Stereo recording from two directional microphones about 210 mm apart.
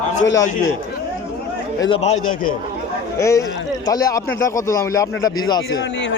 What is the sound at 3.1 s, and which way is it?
Speech, 15° left (ahead or behind).